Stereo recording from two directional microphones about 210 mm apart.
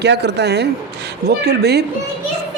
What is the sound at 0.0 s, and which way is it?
Speech, 55° right (ahead or behind).